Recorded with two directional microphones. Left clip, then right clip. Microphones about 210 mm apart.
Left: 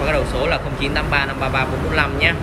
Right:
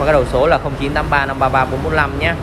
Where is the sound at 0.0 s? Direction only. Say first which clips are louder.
Right 6 dB; 15° right (ahead or behind).